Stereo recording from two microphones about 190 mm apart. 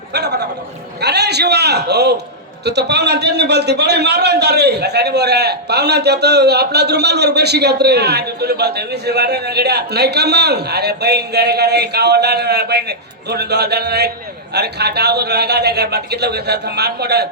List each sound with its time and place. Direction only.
0.1 s a man's voice: 60° right (ahead or behind)